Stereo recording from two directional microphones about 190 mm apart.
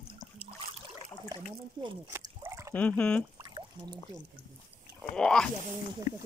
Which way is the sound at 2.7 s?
10° left (ahead or behind).